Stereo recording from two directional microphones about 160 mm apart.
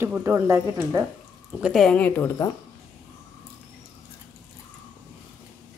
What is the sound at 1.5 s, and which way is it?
Speech, 5° right (ahead or behind).